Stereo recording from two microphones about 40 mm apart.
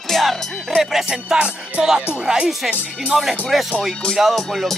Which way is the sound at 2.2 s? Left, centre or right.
Right.